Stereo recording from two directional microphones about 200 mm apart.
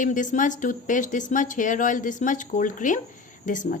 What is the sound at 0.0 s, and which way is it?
Speech, 40° left (ahead or behind).